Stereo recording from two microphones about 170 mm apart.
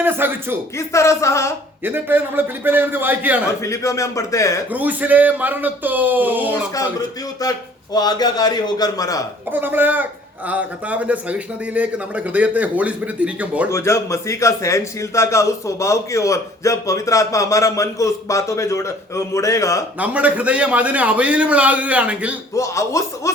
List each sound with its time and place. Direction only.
0.0 s a man's voice: 10° right (ahead or behind)
0.8 s a man's voice: 15° left (ahead or behind)
1.8 s a man's voice: 10° right (ahead or behind)
3.6 s a man's voice: 20° left (ahead or behind)
4.7 s a man's voice: 10° right (ahead or behind)
7.4 s a man's voice: 20° left (ahead or behind)
9.5 s a man's voice: 10° right (ahead or behind)
13.7 s a man's voice: 15° left (ahead or behind)
20.0 s a man's voice: 10° right (ahead or behind)
22.5 s a man's voice: 20° left (ahead or behind)